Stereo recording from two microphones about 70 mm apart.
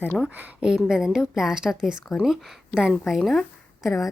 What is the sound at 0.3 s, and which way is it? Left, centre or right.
Speech, right.